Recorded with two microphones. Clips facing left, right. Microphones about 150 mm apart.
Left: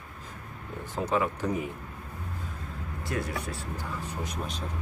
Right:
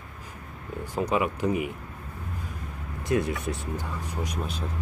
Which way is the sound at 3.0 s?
20° right (ahead or behind).